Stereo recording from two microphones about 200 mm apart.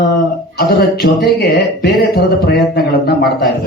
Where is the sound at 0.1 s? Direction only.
50° left (ahead or behind).